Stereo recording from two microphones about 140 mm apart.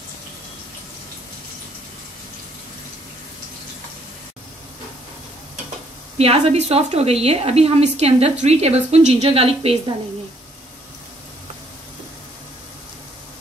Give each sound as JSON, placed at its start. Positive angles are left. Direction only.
{"t": 6.1, "sound": "a woman's voice", "side_deg": -45}